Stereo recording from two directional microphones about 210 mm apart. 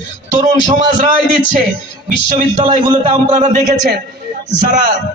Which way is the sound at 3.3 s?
35° right (ahead or behind).